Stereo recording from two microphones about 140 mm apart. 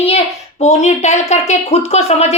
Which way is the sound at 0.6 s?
55° left (ahead or behind).